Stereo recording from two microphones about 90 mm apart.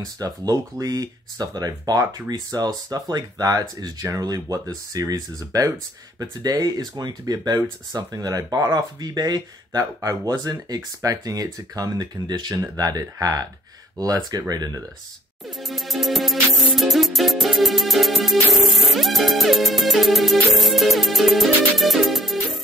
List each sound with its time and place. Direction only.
0.0 s speech: 45° right (ahead or behind)
15.6 s music: centre (ahead or behind)